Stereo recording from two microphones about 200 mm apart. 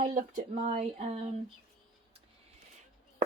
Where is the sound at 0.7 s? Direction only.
35° right (ahead or behind).